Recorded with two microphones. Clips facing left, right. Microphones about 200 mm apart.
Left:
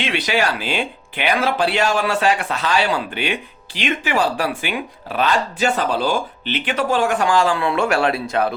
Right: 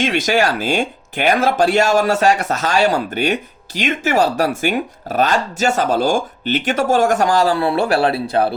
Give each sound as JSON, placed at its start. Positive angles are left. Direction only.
{"t": 0.0, "sound": "speech", "side_deg": -45}